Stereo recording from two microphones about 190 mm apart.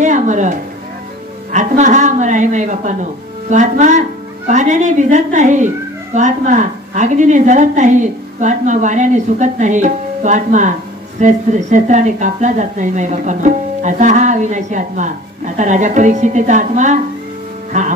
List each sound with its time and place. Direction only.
0.0 s a woman's voice: 40° right (ahead or behind)